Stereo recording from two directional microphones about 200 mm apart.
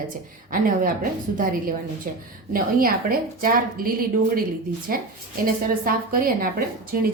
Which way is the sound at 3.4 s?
45° right (ahead or behind).